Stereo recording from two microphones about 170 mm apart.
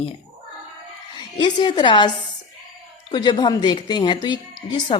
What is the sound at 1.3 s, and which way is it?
A woman's voice, 25° left (ahead or behind).